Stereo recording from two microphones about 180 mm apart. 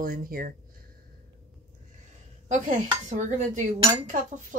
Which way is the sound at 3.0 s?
40° right (ahead or behind).